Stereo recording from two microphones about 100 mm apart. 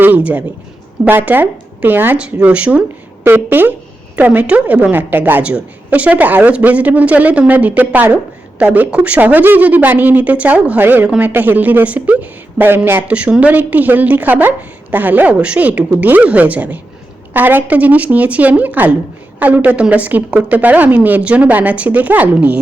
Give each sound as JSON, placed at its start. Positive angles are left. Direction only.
{"t": 1.0, "sound": "a woman's voice", "side_deg": -20}